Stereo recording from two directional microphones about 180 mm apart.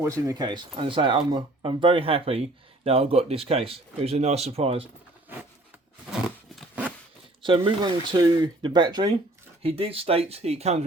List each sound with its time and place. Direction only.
0.0 s speech: 20° right (ahead or behind); by 4.9 s 35° right (ahead or behind)
6.6 s a sound: 10° right (ahead or behind)
7.4 s speech: 25° right (ahead or behind)